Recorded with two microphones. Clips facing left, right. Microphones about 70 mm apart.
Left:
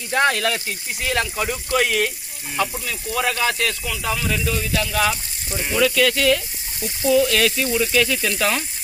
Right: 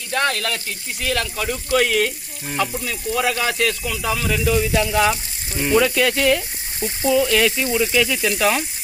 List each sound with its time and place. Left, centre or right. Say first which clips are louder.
0.1 s speech: left 2 dB; centre
6.7 s speech: right 2 dB; right
7.1 s speech: even; centre